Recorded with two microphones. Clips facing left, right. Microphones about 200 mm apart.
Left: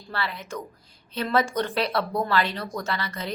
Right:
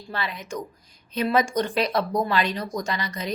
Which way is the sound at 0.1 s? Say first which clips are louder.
Right 1 dB; 15° right (ahead or behind).